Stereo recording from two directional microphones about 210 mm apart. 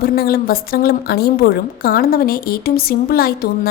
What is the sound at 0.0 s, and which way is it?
A woman's voice, 45° left (ahead or behind).